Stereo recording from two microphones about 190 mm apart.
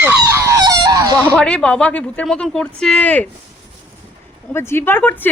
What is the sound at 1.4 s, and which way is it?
Speech, 5° left (ahead or behind).